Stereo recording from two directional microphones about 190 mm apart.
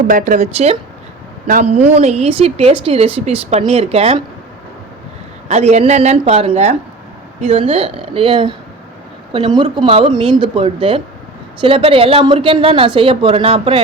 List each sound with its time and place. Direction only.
0.1 s a woman's voice: 45° right (ahead or behind)
5.5 s a woman's voice: 35° right (ahead or behind)